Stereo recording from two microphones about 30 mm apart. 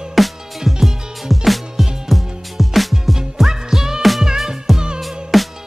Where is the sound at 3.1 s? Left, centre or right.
Centre.